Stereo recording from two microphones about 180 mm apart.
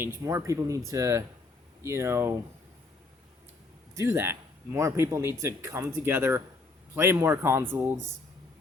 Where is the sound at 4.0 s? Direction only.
15° right (ahead or behind).